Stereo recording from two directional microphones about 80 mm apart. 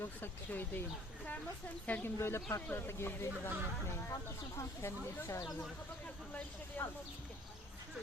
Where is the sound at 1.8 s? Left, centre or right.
Centre.